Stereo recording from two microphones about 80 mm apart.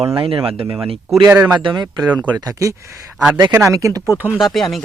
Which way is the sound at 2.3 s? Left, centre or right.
Right.